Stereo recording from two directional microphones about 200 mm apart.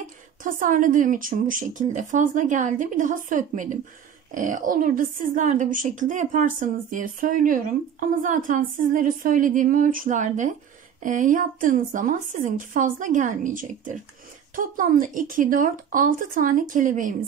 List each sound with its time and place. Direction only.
0.4 s speech: 40° right (ahead or behind)